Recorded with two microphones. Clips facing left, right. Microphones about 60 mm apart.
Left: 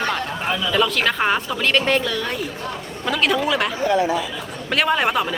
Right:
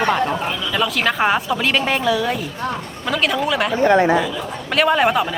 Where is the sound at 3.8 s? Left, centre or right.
Right.